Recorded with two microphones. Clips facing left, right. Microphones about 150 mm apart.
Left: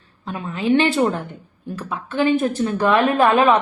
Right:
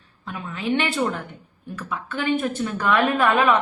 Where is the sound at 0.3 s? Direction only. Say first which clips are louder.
Left 6 dB; 30° left (ahead or behind).